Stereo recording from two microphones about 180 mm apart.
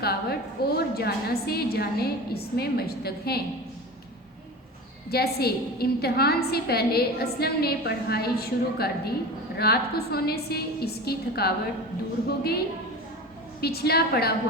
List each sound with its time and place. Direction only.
0.0 s a sound: 60° left (ahead or behind)
0.8 s a woman's voice: 60° left (ahead or behind)
5.1 s a woman's voice: 60° left (ahead or behind)